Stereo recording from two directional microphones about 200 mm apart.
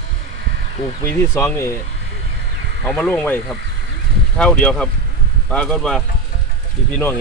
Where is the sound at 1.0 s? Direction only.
15° left (ahead or behind).